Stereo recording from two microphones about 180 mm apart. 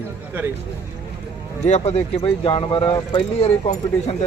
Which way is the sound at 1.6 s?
35° left (ahead or behind).